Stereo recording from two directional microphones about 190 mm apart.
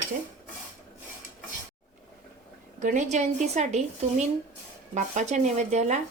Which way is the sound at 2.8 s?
40° right (ahead or behind).